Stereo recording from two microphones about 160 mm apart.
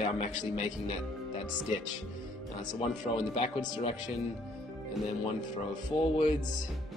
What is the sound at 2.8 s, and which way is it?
Speech, 40° left (ahead or behind).